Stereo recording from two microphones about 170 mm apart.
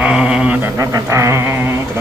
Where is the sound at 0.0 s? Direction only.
5° right (ahead or behind).